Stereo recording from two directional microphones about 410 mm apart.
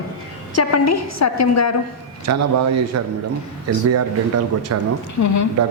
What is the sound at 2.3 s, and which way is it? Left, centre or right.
Speech, right.